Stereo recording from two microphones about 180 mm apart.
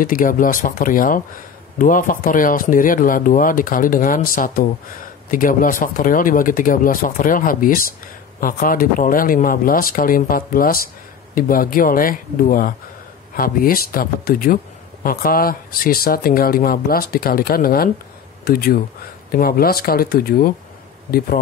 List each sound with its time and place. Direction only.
0.0 s speech: 50° left (ahead or behind)